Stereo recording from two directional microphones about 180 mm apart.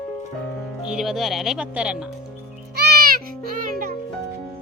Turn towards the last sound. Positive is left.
turn(degrees=-50)  # may be behind; listen again after turning